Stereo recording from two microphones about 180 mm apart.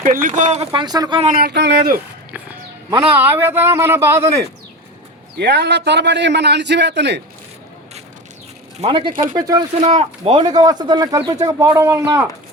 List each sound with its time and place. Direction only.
0.0 s speech: 45° right (ahead or behind); by 1.2 s 20° right (ahead or behind)
1.4 s speech: 65° right (ahead or behind)
3.2 s speech: 10° right (ahead or behind)
5.4 s a man's voice: 70° right (ahead or behind)
8.8 s speech: 30° right (ahead or behind)
9.8 s speech: 35° right (ahead or behind)